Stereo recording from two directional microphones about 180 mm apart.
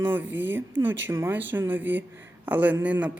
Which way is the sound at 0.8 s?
90° right.